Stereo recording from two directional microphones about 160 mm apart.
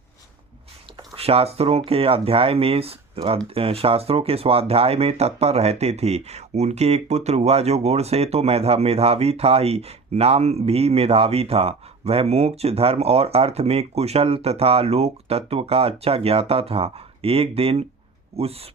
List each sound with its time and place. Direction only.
1.1 s speech: 40° right (ahead or behind)